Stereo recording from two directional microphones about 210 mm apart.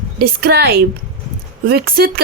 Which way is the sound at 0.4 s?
50° right (ahead or behind).